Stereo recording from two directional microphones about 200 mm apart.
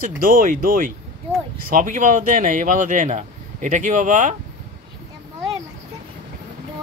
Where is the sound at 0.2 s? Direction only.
45° right (ahead or behind).